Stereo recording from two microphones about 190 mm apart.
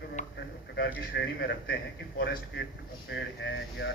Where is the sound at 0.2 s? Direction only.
40° left (ahead or behind).